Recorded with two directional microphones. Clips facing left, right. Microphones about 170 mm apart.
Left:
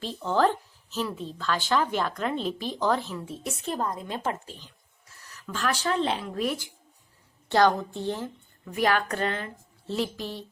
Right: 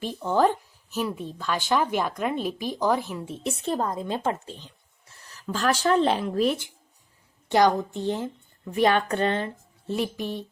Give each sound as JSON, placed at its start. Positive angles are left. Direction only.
{"t": 0.0, "sound": "speech", "side_deg": -15}
{"t": 6.4, "sound": "speech", "side_deg": -25}
{"t": 9.8, "sound": "speech", "side_deg": -15}